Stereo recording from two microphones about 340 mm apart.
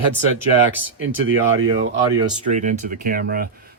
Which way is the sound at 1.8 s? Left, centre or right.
Centre.